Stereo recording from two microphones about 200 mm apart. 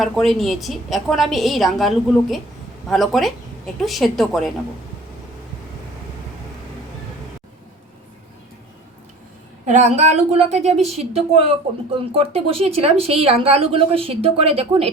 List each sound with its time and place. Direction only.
0.0 s a woman's voice: centre (ahead or behind)
2.9 s a woman's voice: centre (ahead or behind)
9.6 s speech: 35° right (ahead or behind)